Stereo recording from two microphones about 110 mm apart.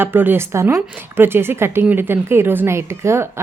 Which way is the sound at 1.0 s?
20° right (ahead or behind).